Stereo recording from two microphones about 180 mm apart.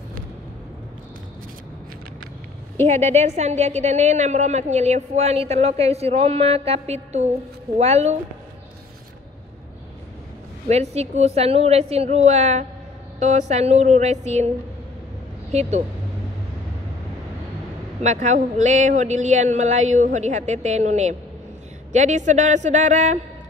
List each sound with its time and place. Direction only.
3.2 s a woman's voice: 40° right (ahead or behind)
10.7 s a woman's voice: 35° right (ahead or behind)
15.5 s a woman's voice: 40° right (ahead or behind)
18.0 s a woman's voice: 40° right (ahead or behind)